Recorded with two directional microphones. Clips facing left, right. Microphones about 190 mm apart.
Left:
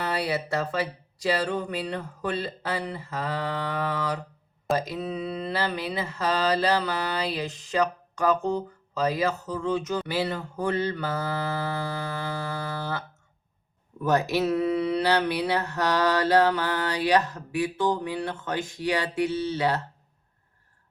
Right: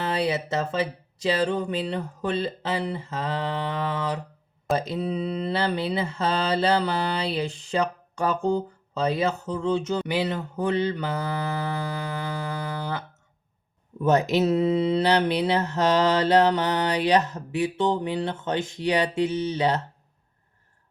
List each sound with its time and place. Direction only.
0.0 s mantra: 25° right (ahead or behind)